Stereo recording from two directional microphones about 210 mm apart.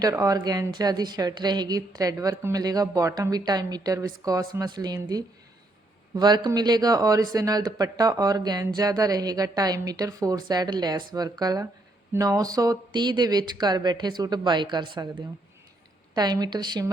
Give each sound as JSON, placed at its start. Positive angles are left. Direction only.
{"t": 0.0, "sound": "speech", "side_deg": -15}
{"t": 16.1, "sound": "speech", "side_deg": -20}